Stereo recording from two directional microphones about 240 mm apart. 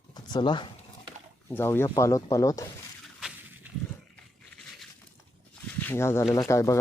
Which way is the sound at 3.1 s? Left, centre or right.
Centre.